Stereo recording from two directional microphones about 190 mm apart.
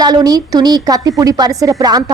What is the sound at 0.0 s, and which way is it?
A woman's voice, 20° right (ahead or behind).